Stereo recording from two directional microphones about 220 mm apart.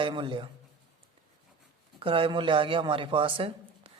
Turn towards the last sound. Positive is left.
turn(degrees=-25)  # may be behind; listen again after turning